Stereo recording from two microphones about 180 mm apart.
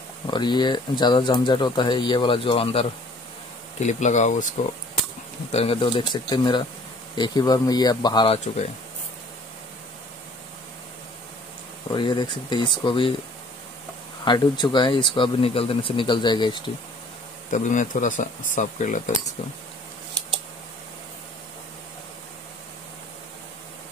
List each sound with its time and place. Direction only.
0.3 s speech: 25° left (ahead or behind); by 4.5 s 40° left (ahead or behind)
5.5 s speech: 35° left (ahead or behind)
11.9 s speech: 25° left (ahead or behind)
14.2 s speech: 25° left (ahead or behind)
17.5 s speech: 45° left (ahead or behind)